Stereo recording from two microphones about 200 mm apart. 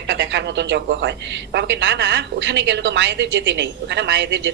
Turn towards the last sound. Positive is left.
turn(degrees=-60)  # may be behind; listen again after turning